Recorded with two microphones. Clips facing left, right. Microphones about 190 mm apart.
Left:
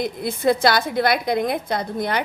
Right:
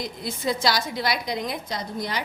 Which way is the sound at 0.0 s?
55° left (ahead or behind).